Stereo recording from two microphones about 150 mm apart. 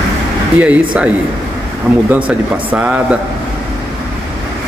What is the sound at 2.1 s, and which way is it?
Speech, 10° right (ahead or behind).